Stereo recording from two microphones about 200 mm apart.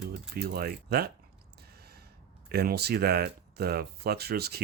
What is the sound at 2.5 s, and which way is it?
Speech, 50° right (ahead or behind).